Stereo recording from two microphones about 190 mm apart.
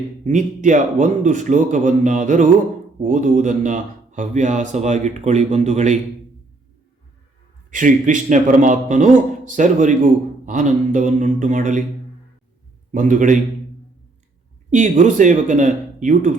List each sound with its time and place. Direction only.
0.3 s speech: 40° right (ahead or behind)
7.7 s speech: 40° right (ahead or behind)
12.9 s a man's voice: 40° right (ahead or behind)
14.7 s speech: 40° right (ahead or behind)